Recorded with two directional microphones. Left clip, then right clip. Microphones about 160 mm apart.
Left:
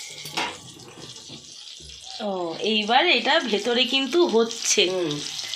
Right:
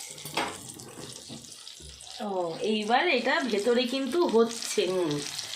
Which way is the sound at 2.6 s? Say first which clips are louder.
Left 6 dB; 35° left (ahead or behind).